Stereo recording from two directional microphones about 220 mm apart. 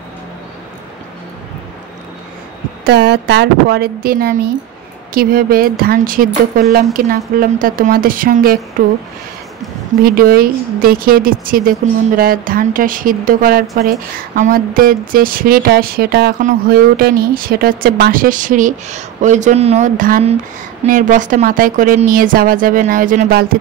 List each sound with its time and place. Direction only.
2.8 s a woman's voice: 50° right (ahead or behind)
10.0 s speech: 40° right (ahead or behind)